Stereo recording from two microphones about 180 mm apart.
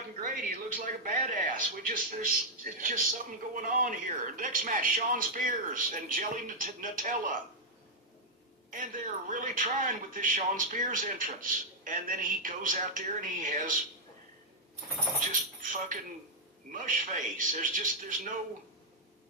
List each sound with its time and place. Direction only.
0.2 s speech: 50° right (ahead or behind)
8.7 s speech: 50° right (ahead or behind)
15.3 s speech: 45° right (ahead or behind)